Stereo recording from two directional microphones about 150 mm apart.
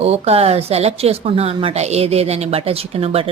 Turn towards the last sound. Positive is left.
turn(degrees=-40)  # may be behind; listen again after turning